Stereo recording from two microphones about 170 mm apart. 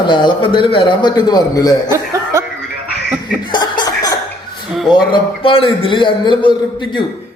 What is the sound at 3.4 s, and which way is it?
Cough, 25° left (ahead or behind).